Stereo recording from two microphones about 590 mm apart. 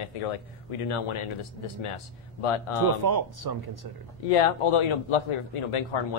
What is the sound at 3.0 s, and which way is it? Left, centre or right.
Speech, right.